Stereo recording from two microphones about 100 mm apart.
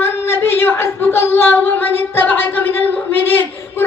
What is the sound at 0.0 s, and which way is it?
Singing, 25° left (ahead or behind).